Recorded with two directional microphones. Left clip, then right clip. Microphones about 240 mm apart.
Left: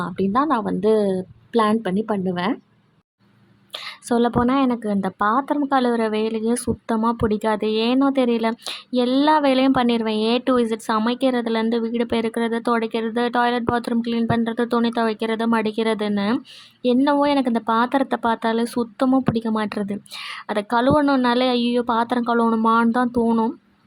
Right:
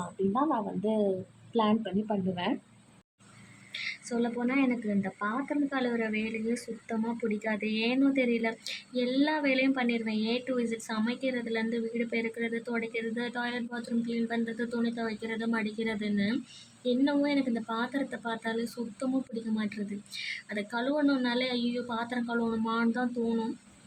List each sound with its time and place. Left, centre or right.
0.3 s speech: left
3.7 s a woman's voice: left